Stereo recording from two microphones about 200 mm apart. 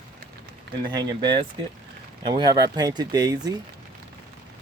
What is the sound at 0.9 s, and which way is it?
Speech, 20° right (ahead or behind).